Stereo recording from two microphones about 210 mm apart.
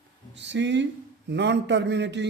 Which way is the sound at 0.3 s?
55° right (ahead or behind).